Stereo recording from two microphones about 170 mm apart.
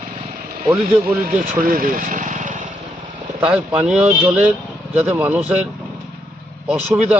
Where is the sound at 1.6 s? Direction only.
55° right (ahead or behind).